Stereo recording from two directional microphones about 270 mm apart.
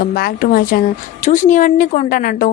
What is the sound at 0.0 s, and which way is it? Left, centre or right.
A woman's voice, left.